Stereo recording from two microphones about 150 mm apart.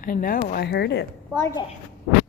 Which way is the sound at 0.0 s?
70° left (ahead or behind).